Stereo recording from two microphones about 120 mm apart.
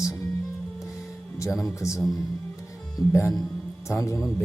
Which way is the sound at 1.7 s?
25° left (ahead or behind).